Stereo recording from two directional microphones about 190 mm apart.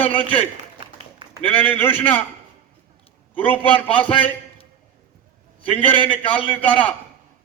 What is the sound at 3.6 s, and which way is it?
Speech, 30° left (ahead or behind).